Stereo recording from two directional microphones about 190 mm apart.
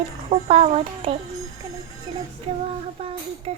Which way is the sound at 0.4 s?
35° right (ahead or behind).